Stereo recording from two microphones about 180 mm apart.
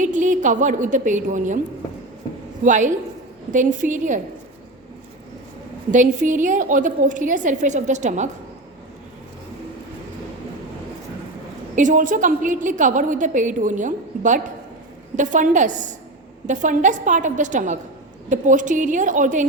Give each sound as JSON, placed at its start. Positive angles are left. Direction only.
{"t": 0.0, "sound": "a woman's voice", "side_deg": -45}
{"t": 2.6, "sound": "a woman's voice", "side_deg": -45}
{"t": 5.9, "sound": "a woman's voice", "side_deg": -45}
{"t": 11.7, "sound": "a woman's voice", "side_deg": -45}